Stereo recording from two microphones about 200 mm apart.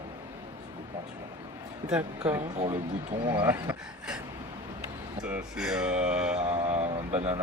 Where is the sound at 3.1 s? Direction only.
25° right (ahead or behind).